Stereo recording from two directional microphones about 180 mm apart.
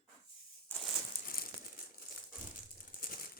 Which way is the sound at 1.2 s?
55° left (ahead or behind).